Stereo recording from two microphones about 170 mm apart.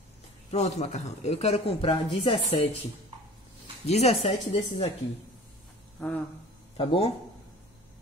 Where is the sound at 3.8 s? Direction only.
40° left (ahead or behind).